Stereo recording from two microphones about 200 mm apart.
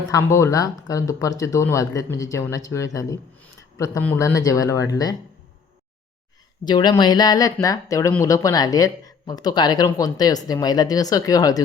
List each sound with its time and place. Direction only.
0.1 s speech: 15° left (ahead or behind)
6.7 s speech: 20° left (ahead or behind)